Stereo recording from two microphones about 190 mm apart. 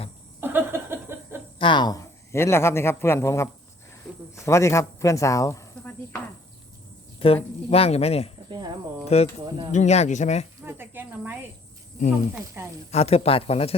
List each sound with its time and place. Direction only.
0.3 s laughter: 10° right (ahead or behind)
1.5 s a man's voice: 25° left (ahead or behind)
7.2 s speech: 30° left (ahead or behind)
8.4 s a sound: 20° right (ahead or behind)
9.0 s speech: 35° left (ahead or behind)
10.6 s snake: 10° right (ahead or behind)
12.6 s speech: 10° right (ahead or behind)
12.9 s speech: 35° left (ahead or behind)